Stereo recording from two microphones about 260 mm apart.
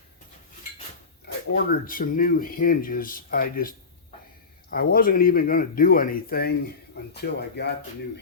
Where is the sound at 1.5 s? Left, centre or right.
Left.